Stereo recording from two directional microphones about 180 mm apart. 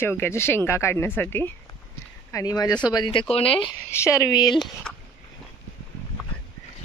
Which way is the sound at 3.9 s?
15° left (ahead or behind).